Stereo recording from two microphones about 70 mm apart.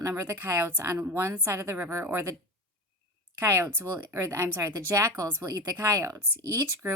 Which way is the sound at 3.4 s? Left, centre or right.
Right.